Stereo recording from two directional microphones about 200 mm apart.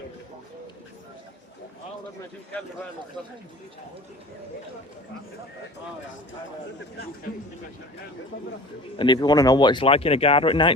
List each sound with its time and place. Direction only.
9.0 s speech: 20° left (ahead or behind)